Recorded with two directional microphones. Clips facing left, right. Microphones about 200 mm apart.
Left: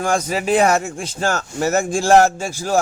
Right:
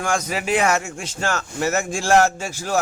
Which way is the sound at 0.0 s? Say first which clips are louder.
Left 4 dB; 35° left (ahead or behind).